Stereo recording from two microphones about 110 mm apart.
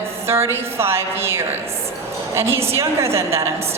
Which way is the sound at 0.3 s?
25° right (ahead or behind).